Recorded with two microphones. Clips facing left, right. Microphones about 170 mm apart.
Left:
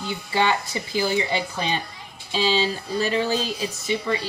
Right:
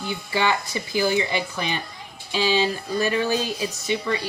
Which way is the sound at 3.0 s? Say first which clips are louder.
Even; 25° left (ahead or behind).